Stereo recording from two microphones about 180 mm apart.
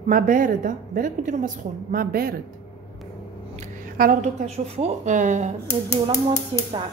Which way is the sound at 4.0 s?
50° right (ahead or behind).